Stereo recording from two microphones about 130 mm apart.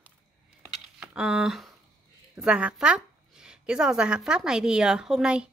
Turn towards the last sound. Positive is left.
turn(degrees=-5)  # may be behind; listen again after turning